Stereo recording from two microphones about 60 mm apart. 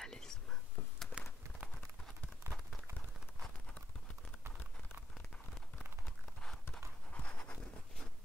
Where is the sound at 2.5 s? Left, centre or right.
Right.